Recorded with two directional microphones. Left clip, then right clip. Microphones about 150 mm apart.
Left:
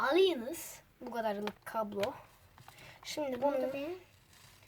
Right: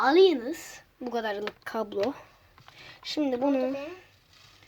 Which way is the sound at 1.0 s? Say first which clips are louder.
Right 5 dB; 40° right (ahead or behind).